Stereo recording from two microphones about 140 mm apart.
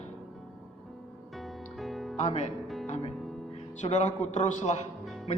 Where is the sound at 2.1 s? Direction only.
50° left (ahead or behind).